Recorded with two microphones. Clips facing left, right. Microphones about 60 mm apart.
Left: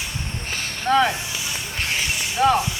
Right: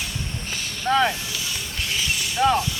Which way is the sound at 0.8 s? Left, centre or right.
Centre.